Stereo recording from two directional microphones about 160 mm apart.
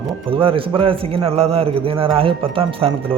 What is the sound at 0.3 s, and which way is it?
A man's voice, 35° right (ahead or behind).